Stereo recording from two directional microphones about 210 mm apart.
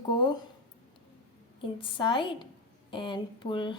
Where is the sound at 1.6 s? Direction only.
25° left (ahead or behind).